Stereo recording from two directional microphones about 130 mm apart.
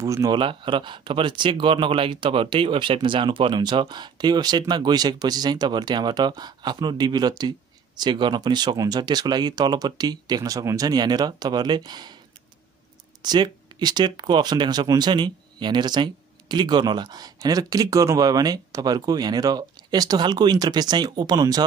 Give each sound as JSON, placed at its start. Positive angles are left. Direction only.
{"t": 0.0, "sound": "speech", "side_deg": -25}
{"t": 0.4, "sound": "speech", "side_deg": -40}
{"t": 13.2, "sound": "speech", "side_deg": -35}